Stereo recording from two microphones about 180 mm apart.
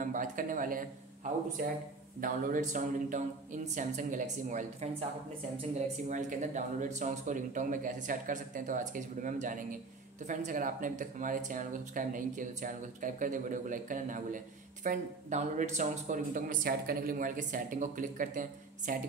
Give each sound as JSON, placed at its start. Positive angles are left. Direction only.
{"t": 0.0, "sound": "speech", "side_deg": -50}
{"t": 2.1, "sound": "speech", "side_deg": -50}